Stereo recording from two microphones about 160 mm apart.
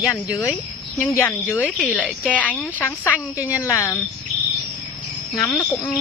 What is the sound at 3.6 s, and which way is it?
Speech, 15° left (ahead or behind).